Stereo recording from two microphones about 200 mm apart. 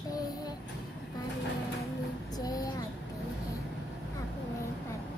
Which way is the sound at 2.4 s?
20° left (ahead or behind).